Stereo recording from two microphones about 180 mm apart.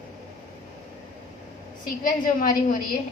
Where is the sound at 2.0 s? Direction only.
50° left (ahead or behind).